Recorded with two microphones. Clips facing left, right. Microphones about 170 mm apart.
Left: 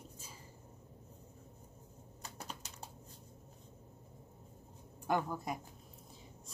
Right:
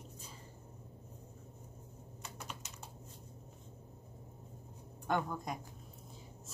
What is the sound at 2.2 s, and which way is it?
Typing, 35° left (ahead or behind).